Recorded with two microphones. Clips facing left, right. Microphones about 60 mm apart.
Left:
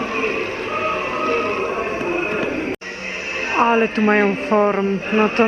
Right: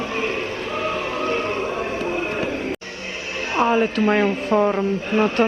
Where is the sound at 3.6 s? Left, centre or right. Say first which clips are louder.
Left 2 dB; left.